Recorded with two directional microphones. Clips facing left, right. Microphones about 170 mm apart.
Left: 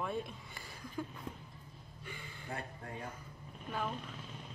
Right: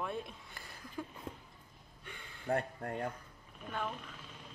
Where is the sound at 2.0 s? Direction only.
Centre (ahead or behind).